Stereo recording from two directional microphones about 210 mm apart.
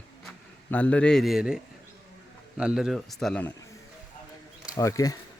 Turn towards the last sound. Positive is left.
turn(degrees=15)  # may be behind; listen again after turning